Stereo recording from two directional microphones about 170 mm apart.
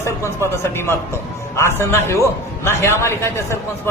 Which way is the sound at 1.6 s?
15° left (ahead or behind).